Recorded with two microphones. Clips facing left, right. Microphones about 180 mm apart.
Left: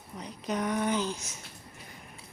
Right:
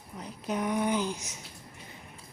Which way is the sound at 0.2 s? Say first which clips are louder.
Even; 5° right (ahead or behind).